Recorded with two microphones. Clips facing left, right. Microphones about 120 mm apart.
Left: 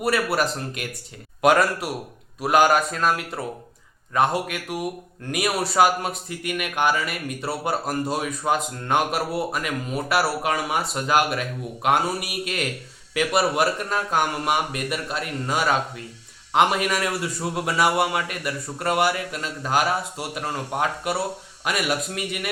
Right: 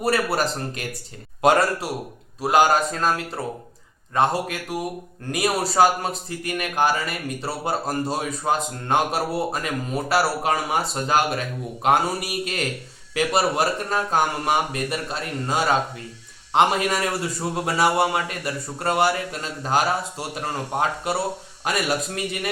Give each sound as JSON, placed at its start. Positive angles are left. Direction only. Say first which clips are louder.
{"t": 0.0, "sound": "speech", "louder": "even", "side_deg": -35}